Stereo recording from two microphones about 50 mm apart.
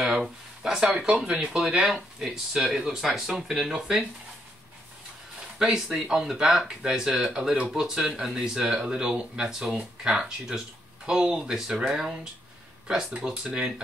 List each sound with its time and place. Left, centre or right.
0.0 s a sound: centre
0.8 s speech: centre
2.1 s speech: centre
5.6 s speech: centre
13.2 s speech: right